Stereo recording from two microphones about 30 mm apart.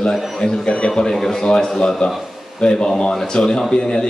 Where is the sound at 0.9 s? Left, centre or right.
Centre.